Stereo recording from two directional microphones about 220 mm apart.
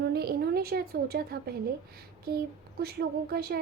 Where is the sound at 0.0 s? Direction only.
45° right (ahead or behind).